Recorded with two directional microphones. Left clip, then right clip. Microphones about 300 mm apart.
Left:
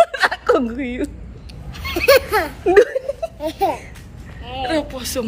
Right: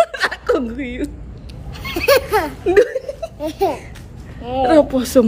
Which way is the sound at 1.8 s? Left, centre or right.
Centre.